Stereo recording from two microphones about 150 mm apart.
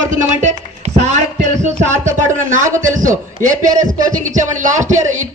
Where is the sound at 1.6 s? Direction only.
55° right (ahead or behind).